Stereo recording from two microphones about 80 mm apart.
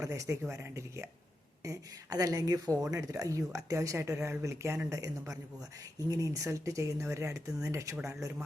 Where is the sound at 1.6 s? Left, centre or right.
Right.